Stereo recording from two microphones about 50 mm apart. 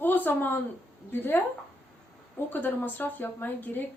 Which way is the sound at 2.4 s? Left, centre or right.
Left.